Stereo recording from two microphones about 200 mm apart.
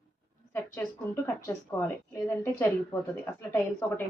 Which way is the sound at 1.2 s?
10° left (ahead or behind).